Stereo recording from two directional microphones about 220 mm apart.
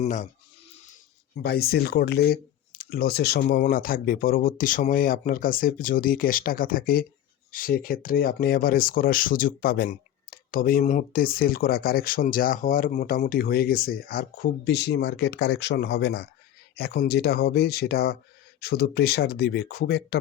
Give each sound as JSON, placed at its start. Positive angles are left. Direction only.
{"t": 0.0, "sound": "speech", "side_deg": 35}
{"t": 1.4, "sound": "speech", "side_deg": 45}